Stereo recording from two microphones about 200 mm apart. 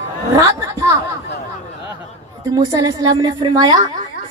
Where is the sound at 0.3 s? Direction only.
15° right (ahead or behind).